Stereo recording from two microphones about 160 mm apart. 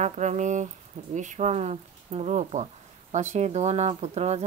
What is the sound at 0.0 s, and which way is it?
Speech, 50° right (ahead or behind).